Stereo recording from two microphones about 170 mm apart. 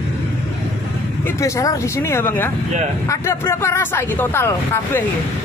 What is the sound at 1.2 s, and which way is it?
Speech, 20° left (ahead or behind).